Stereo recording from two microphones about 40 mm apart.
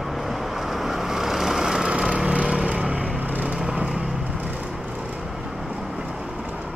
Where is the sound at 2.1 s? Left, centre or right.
Right.